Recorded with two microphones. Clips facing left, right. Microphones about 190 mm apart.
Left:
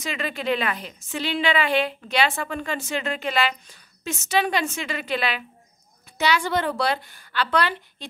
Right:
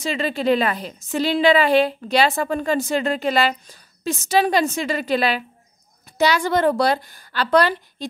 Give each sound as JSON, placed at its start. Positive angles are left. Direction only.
{"t": 0.0, "sound": "a woman's voice", "side_deg": -30}